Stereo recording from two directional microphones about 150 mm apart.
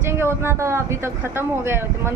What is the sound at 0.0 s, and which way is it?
Speech, 15° right (ahead or behind).